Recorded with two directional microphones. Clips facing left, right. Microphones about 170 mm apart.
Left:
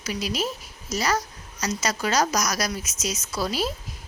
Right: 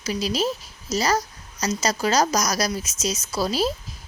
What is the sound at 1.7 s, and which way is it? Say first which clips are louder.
Speech: right 3 dB; 35° right (ahead or behind).